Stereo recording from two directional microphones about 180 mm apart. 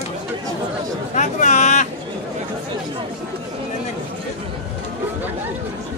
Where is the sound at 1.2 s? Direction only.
40° left (ahead or behind).